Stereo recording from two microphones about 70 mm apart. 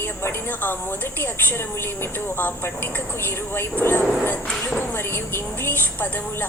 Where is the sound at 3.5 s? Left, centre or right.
Left.